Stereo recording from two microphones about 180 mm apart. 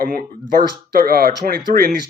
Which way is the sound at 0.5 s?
55° right (ahead or behind).